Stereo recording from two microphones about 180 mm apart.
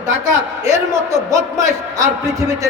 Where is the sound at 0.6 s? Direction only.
15° right (ahead or behind).